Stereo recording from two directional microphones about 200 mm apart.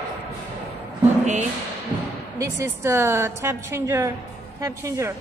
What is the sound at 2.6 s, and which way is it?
A woman's voice, 15° right (ahead or behind).